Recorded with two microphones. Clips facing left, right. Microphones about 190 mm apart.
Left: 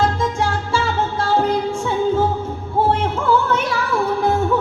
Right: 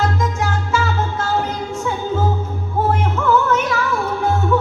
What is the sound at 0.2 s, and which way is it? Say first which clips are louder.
Music: left 1 dB; 30° left (ahead or behind).